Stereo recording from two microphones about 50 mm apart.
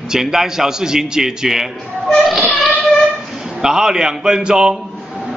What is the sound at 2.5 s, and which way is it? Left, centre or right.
Child singing, centre.